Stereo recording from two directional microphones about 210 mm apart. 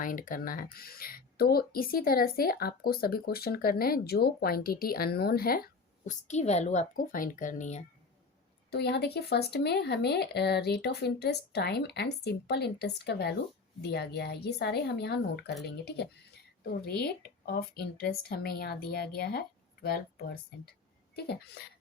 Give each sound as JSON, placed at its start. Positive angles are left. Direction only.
{"t": 0.0, "sound": "speech", "side_deg": 40}
{"t": 6.1, "sound": "a woman's voice", "side_deg": 35}
{"t": 8.7, "sound": "speech", "side_deg": 50}